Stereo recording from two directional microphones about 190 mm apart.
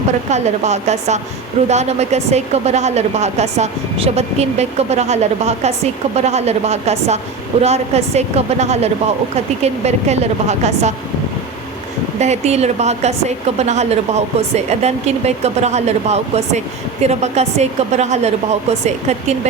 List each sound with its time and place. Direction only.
0.3 s a woman's voice: 35° right (ahead or behind)
12.2 s a woman's voice: 35° right (ahead or behind)